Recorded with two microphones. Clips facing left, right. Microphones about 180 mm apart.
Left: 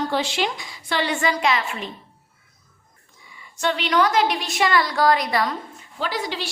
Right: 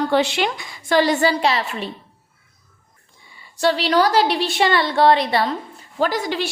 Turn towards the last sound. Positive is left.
turn(degrees=-50)  # may be behind; listen again after turning